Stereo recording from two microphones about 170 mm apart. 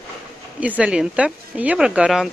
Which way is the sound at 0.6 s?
5° right (ahead or behind).